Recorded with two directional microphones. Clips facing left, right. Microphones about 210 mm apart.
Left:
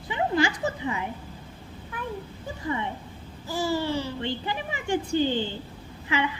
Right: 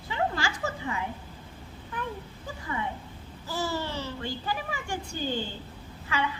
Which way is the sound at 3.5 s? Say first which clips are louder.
Left 5 dB; 15° left (ahead or behind).